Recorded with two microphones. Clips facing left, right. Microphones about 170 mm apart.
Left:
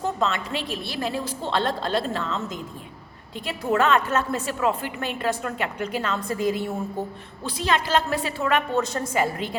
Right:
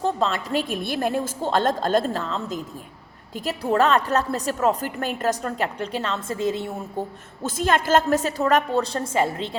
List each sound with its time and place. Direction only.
0.0 s a woman's voice: 35° right (ahead or behind)
0.7 s a woman's voice: 50° right (ahead or behind); by 6.7 s 25° right (ahead or behind)
7.4 s a woman's voice: 50° right (ahead or behind); by 9.6 s 25° right (ahead or behind)